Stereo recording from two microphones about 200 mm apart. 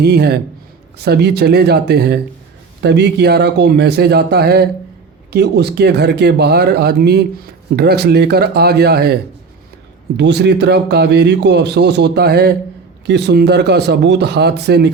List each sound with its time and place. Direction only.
0.0 s speech: 55° right (ahead or behind)
10.2 s speech: 60° right (ahead or behind)